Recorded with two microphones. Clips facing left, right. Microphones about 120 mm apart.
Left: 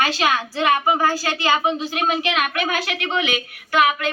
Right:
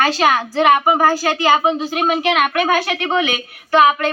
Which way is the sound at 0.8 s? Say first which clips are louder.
Right 5 dB; 30° right (ahead or behind).